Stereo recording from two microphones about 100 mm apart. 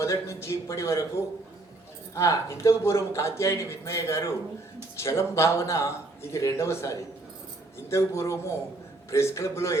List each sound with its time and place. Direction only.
0.0 s speech: 30° left (ahead or behind)